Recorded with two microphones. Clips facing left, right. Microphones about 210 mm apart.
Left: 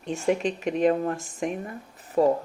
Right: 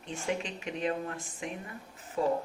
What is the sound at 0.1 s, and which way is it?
Speech, 50° left (ahead or behind).